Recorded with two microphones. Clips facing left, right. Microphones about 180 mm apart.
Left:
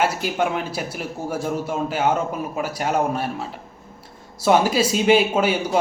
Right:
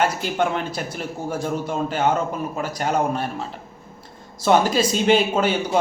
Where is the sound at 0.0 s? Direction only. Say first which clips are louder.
Even; 5° left (ahead or behind).